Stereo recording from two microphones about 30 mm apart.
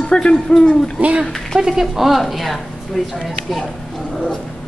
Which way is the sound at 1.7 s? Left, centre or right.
Centre.